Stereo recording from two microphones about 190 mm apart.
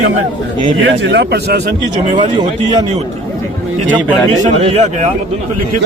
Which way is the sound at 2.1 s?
25° right (ahead or behind).